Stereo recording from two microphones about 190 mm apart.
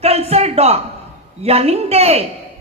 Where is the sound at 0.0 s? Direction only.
35° right (ahead or behind).